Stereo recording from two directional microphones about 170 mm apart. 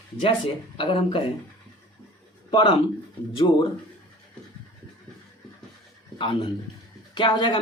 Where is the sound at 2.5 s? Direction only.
30° left (ahead or behind).